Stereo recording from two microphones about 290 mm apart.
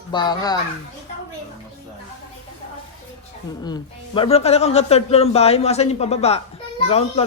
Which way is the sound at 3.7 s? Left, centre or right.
Centre.